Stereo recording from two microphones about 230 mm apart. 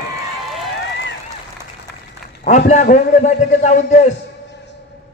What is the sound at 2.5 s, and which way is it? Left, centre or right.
A man's voice, left.